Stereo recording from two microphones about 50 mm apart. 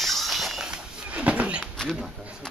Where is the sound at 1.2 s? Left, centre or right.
Right.